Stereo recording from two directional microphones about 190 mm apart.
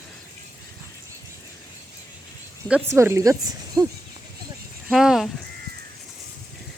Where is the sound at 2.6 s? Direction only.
10° right (ahead or behind).